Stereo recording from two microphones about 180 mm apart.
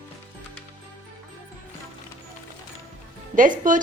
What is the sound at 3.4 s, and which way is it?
Speech, 45° right (ahead or behind).